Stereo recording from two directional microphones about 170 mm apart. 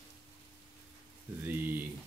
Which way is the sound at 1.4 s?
10° right (ahead or behind).